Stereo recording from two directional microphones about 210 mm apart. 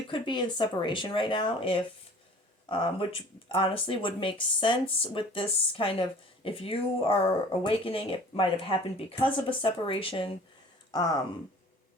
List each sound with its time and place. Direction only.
0.1 s speech: 20° left (ahead or behind)